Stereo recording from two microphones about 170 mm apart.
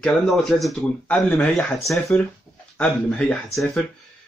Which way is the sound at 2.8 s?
5° left (ahead or behind).